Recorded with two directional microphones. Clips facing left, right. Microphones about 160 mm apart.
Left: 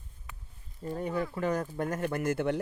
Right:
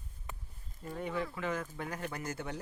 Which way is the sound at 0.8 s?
40° left (ahead or behind).